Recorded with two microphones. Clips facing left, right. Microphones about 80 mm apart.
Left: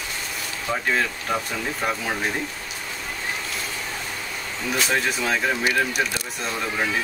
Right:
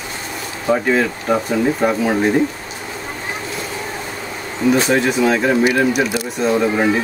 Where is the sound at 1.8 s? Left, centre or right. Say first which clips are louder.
Right 9 dB; centre.